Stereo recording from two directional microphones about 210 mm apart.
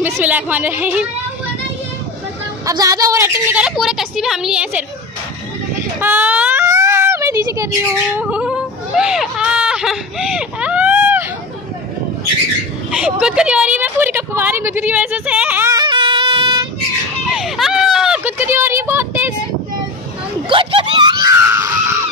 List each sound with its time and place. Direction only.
0.0 s a woman's voice: 10° right (ahead or behind)
2.6 s a woman's voice: 15° right (ahead or behind)
5.9 s a sound: 10° right (ahead or behind)
12.9 s a woman's voice: 5° right (ahead or behind); by 16.6 s 25° right (ahead or behind)
17.3 s a sound: centre (ahead or behind)
20.4 s screaming: 25° right (ahead or behind)